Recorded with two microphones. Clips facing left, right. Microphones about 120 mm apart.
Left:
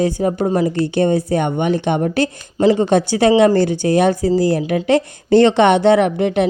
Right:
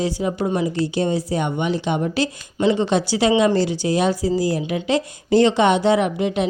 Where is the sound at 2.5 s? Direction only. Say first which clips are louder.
Left 5 dB; 35° left (ahead or behind).